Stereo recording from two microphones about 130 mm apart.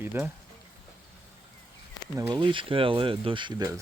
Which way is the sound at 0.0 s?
15° right (ahead or behind).